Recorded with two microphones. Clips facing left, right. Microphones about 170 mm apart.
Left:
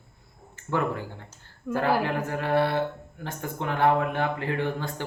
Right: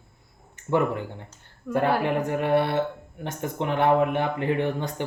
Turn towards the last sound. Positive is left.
turn(degrees=-20)  # may be behind; listen again after turning